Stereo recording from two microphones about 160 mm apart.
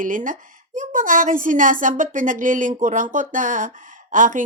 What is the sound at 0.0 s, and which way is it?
A woman's voice, 55° right (ahead or behind).